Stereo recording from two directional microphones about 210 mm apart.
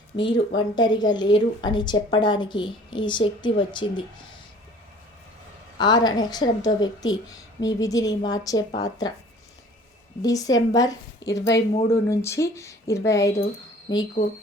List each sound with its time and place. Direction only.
0.2 s a woman's voice: 20° left (ahead or behind)
5.7 s a woman's voice: 20° left (ahead or behind)
10.2 s a woman's voice: 15° left (ahead or behind)